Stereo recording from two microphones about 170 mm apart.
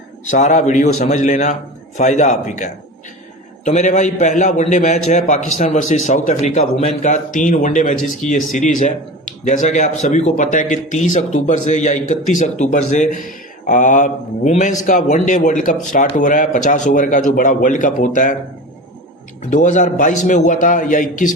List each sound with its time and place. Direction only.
0.3 s a man's voice: 45° left (ahead or behind)
19.4 s a man's voice: 45° left (ahead or behind)